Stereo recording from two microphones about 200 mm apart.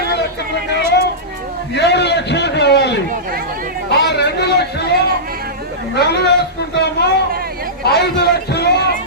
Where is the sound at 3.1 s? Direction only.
45° right (ahead or behind).